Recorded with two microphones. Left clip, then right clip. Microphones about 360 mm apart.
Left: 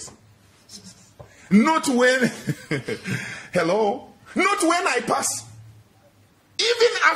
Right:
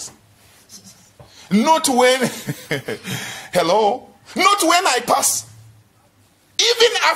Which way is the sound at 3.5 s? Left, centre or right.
Centre.